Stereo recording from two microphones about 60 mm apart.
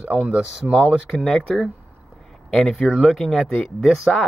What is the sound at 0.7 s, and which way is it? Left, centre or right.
Speech, centre.